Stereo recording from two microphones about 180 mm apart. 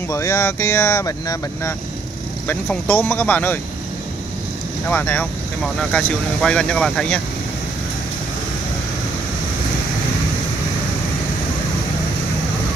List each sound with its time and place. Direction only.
0.1 s speech: 15° left (ahead or behind)
4.8 s speech: 10° left (ahead or behind)